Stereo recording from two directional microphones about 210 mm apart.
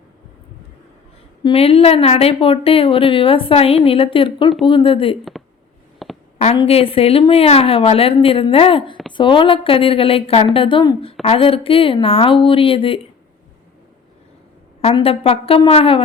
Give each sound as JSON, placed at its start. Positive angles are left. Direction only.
{"t": 1.5, "sound": "a woman's voice", "side_deg": 25}
{"t": 6.0, "sound": "a sound", "side_deg": 0}
{"t": 6.6, "sound": "a woman's voice", "side_deg": 25}
{"t": 14.8, "sound": "a woman's voice", "side_deg": 30}